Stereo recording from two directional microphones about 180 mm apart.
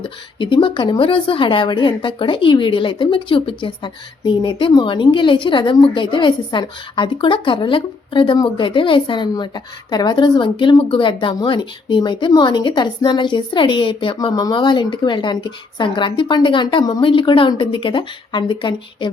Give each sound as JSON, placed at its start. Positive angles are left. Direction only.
{"t": 0.0, "sound": "speech", "side_deg": 25}